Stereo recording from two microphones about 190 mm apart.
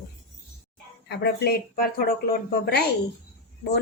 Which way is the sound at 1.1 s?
55° left (ahead or behind).